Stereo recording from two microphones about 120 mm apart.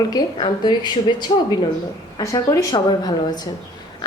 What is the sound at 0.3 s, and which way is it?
Speech, 40° left (ahead or behind).